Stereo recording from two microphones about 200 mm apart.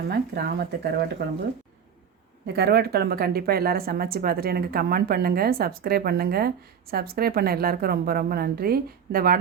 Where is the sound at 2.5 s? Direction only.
50° right (ahead or behind).